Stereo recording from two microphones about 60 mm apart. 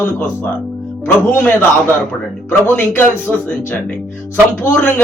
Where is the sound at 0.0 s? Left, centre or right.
Left.